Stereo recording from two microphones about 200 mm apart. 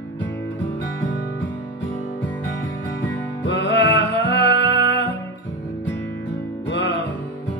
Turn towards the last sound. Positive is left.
turn(degrees=65)  # may be behind; listen again after turning